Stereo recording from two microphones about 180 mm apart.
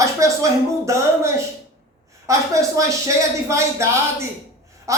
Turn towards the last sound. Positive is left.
turn(degrees=-15)  # may be behind; listen again after turning